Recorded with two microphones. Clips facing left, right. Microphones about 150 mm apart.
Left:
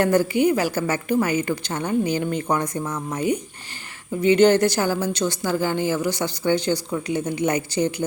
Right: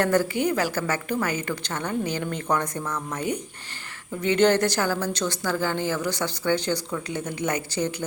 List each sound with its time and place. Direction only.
0.0 s a woman's voice: 15° left (ahead or behind)
2.8 s speech: 25° left (ahead or behind)
4.2 s a woman's voice: 10° left (ahead or behind)